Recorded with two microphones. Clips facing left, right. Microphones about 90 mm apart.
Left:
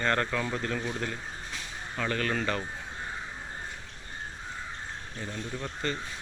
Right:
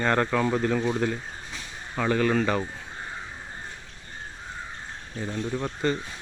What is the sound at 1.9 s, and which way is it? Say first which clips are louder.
Speech: right 7 dB; 15° right (ahead or behind).